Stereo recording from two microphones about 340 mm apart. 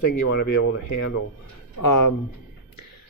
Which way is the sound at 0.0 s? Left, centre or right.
Left.